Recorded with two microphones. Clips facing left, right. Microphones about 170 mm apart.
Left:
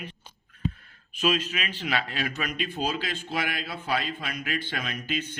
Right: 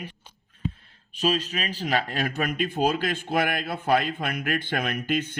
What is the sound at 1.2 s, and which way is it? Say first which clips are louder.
A man's voice: right 1 dB; 35° right (ahead or behind).